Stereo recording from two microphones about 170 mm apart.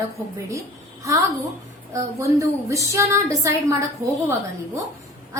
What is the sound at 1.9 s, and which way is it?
A woman's voice, 20° right (ahead or behind).